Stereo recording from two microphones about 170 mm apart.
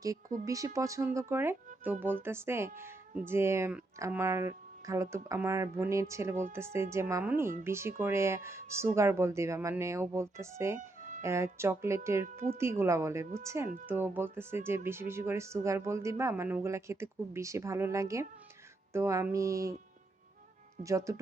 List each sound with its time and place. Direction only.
0.4 s speech: 20° right (ahead or behind)
20.8 s speech: 20° right (ahead or behind)